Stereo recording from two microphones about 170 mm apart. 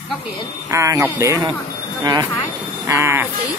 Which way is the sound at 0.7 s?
20° right (ahead or behind).